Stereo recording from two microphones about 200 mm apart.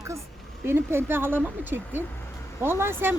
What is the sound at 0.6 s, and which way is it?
Speech, 10° right (ahead or behind).